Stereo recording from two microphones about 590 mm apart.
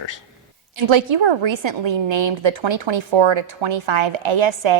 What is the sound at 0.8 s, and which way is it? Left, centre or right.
A woman's voice, right.